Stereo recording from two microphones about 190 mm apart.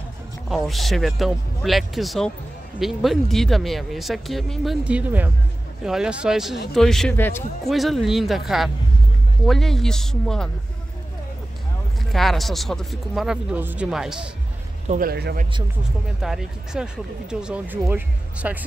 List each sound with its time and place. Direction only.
0.5 s speech: centre (ahead or behind)
7.6 s speech: centre (ahead or behind)
12.1 s speech: centre (ahead or behind)
14.9 s a man's voice: 50° right (ahead or behind)
16.2 s speech: centre (ahead or behind)